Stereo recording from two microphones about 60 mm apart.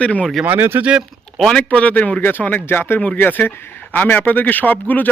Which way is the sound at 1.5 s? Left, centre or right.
Centre.